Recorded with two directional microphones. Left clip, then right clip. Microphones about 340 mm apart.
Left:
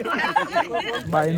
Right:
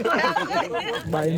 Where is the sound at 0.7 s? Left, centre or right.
Centre.